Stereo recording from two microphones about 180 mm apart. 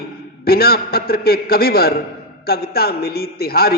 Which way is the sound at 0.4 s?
60° left (ahead or behind).